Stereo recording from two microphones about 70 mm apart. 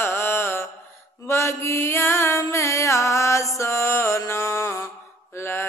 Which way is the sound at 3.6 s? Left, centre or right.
Left.